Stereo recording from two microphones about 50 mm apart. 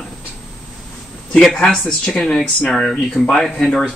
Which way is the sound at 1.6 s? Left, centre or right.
Centre.